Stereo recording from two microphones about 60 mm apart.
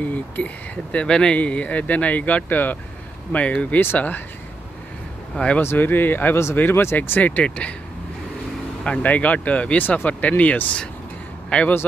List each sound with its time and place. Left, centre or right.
0.0 s speech: left
0.9 s speech: centre; by 4.2 s left
5.3 s speech: centre
5.6 s speech: left
7.0 s speech: left
8.8 s speech: left